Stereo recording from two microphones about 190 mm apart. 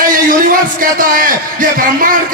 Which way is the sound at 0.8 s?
45° right (ahead or behind).